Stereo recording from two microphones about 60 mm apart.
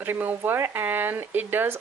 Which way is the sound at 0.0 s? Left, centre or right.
Right.